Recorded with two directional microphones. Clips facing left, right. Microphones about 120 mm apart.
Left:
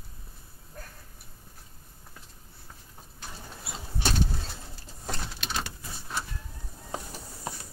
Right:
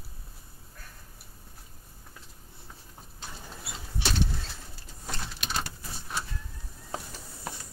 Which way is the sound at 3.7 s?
45° left (ahead or behind).